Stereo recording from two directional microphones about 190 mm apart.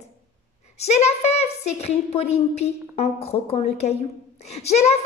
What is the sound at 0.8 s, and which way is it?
A woman's voice, 35° left (ahead or behind).